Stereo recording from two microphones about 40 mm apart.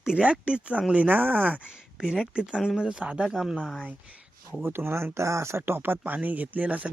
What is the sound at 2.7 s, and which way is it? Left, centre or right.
Speech, centre.